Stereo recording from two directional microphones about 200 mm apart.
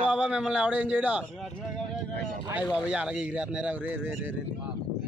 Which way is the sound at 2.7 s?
5° right (ahead or behind).